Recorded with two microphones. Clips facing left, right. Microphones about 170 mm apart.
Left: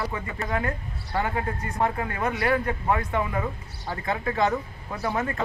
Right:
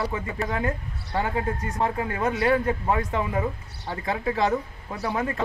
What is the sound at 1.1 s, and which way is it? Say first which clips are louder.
Speech: right 1 dB; 20° right (ahead or behind).